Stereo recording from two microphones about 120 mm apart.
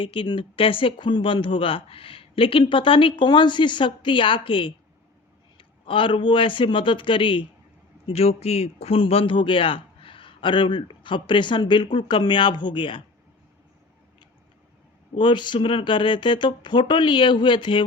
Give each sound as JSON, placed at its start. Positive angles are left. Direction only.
{"t": 0.0, "sound": "speech", "side_deg": 45}
{"t": 8.0, "sound": "speech", "side_deg": 55}
{"t": 15.1, "sound": "speech", "side_deg": 40}